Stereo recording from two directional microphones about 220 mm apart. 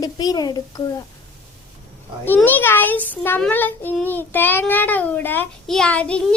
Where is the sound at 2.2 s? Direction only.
10° left (ahead or behind).